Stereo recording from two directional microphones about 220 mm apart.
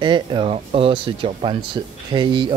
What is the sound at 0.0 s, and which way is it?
Speech, 20° right (ahead or behind).